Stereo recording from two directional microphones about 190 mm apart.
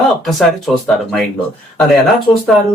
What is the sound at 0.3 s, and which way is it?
Speech, centre (ahead or behind).